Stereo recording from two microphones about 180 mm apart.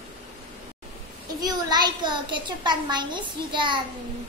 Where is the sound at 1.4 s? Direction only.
20° right (ahead or behind).